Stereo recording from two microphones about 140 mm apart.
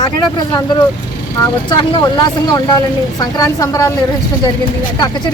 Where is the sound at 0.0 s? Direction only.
30° left (ahead or behind).